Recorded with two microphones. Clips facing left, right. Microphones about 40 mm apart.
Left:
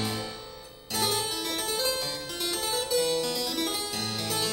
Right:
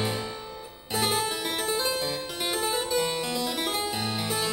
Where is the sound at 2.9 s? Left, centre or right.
Centre.